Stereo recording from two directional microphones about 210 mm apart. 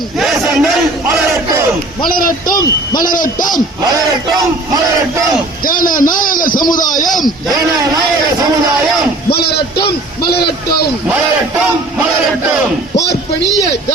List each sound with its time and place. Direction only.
0.2 s a sound: centre (ahead or behind)
2.0 s a man's voice: 40° left (ahead or behind)
3.9 s speech: 15° right (ahead or behind)
5.6 s a man's voice: 40° left (ahead or behind)
9.3 s a man's voice: 50° left (ahead or behind)